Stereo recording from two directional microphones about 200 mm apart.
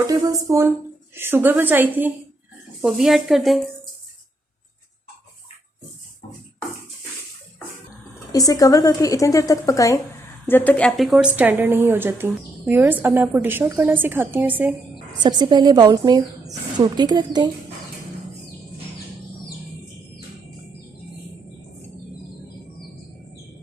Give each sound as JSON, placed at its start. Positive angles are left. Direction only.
{"t": 0.1, "sound": "a woman's voice", "side_deg": -15}
{"t": 8.3, "sound": "a woman's voice", "side_deg": 20}
{"t": 14.9, "sound": "speech", "side_deg": -20}